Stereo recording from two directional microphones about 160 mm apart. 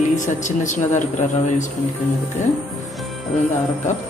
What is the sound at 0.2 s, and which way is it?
Speech, 50° left (ahead or behind).